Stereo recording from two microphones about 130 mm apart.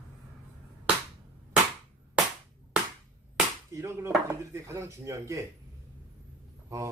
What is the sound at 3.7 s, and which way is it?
Speech, 20° right (ahead or behind).